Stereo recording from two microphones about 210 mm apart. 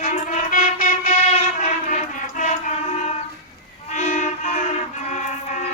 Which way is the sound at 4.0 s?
35° left (ahead or behind).